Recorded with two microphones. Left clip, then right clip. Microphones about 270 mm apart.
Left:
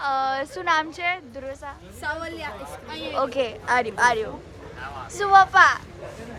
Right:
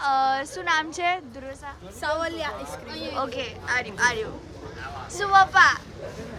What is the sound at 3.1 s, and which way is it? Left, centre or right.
Speech, centre.